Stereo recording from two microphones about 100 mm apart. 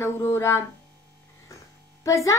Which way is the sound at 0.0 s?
25° left (ahead or behind).